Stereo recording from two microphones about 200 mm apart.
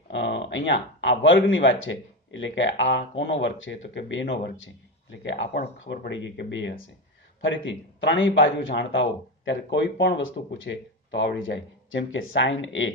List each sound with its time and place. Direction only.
0.1 s speech: 65° left (ahead or behind)